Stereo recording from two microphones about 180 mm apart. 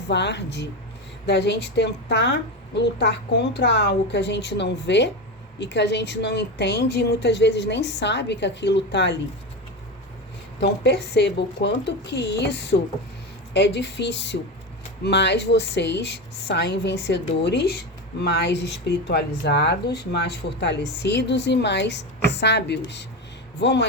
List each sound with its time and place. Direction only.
0.1 s speech: 70° left (ahead or behind)
10.6 s speech: 70° left (ahead or behind)